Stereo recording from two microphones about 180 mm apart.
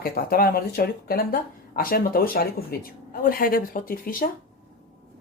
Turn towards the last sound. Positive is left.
turn(degrees=50)  # may be behind; listen again after turning